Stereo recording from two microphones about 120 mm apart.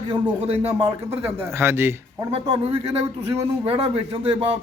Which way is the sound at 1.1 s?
20° right (ahead or behind).